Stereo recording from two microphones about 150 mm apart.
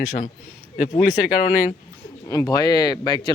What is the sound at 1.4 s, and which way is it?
Speech, 65° left (ahead or behind).